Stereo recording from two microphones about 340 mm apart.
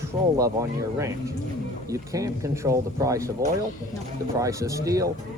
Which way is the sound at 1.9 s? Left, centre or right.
Centre.